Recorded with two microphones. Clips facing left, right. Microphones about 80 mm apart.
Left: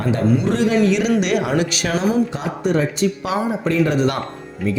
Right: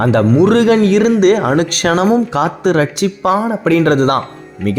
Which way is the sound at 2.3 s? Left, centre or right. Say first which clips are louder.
Right 7 dB; right.